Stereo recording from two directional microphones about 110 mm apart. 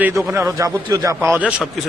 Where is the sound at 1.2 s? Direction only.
15° right (ahead or behind).